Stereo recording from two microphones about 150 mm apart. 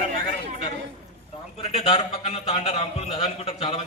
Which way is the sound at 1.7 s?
45° left (ahead or behind).